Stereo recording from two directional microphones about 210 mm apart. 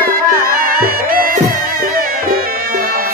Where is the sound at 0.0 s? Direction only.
45° right (ahead or behind).